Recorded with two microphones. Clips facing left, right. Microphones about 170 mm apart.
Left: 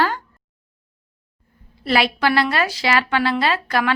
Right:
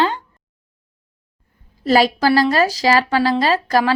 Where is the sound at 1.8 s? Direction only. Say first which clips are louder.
Right 4 dB; 40° right (ahead or behind).